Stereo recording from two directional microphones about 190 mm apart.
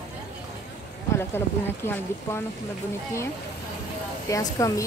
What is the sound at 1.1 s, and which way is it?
Speech, 10° left (ahead or behind).